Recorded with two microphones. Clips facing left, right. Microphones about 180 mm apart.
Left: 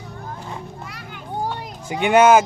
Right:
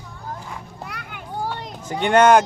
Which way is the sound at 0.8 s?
60° right (ahead or behind).